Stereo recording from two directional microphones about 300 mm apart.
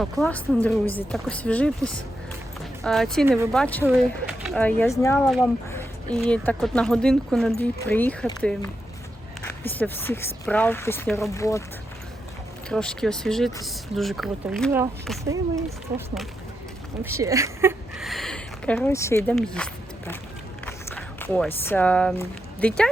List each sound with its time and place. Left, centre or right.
0.0 s speech: centre
9.6 s speech: centre
12.6 s speech: centre